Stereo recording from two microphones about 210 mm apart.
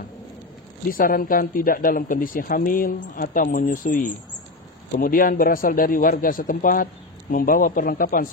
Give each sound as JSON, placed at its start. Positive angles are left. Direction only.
{"t": 0.8, "sound": "a man's voice", "side_deg": 40}